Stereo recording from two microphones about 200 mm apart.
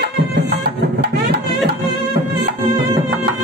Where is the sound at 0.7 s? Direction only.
50° right (ahead or behind).